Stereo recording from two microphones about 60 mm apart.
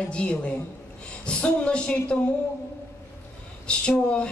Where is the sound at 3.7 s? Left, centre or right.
Centre.